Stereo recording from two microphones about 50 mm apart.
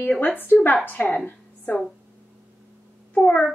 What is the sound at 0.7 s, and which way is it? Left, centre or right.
Speech, left.